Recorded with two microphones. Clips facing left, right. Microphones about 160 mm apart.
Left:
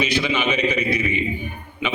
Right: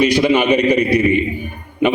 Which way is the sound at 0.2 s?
55° right (ahead or behind).